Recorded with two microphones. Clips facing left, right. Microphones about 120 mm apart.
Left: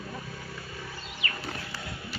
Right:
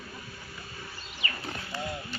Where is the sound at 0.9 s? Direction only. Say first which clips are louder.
Right 1 dB; 90° left.